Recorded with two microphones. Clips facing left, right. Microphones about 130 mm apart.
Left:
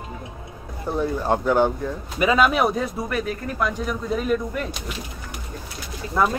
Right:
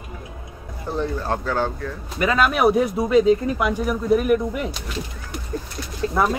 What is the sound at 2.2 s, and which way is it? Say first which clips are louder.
Speech: right 1 dB; centre (ahead or behind).